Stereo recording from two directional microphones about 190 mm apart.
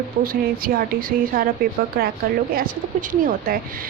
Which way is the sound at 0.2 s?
55° right (ahead or behind).